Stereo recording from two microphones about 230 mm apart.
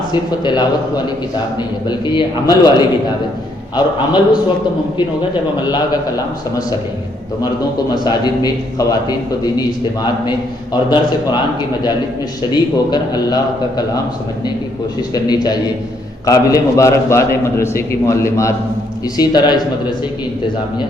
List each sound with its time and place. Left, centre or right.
0.1 s a man's voice: centre
5.6 s a man's voice: centre
7.9 s a man's voice: centre
12.4 s a man's voice: centre
15.1 s a man's voice: centre